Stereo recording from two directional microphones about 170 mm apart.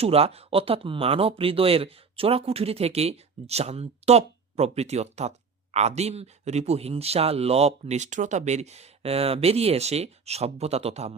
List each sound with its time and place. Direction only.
0.0 s speech: 35° right (ahead or behind)